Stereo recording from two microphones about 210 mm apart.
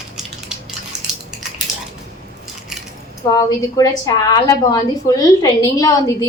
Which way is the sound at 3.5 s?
15° left (ahead or behind).